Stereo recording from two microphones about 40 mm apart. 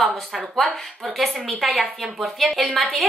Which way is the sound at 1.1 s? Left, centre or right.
Centre.